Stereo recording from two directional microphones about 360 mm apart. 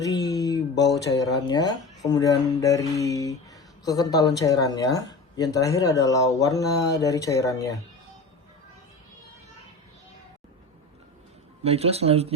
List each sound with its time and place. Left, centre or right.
0.0 s a sound: centre
0.8 s speech: left
1.1 s speech: centre
11.6 s speech: centre